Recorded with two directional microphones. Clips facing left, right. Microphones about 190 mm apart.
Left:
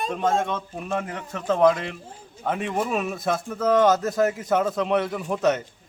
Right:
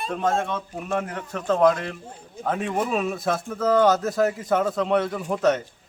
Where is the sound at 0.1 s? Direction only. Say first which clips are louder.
Right 1 dB; centre (ahead or behind).